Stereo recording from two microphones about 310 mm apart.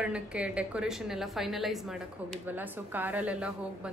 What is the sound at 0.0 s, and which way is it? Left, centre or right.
A woman's voice, centre.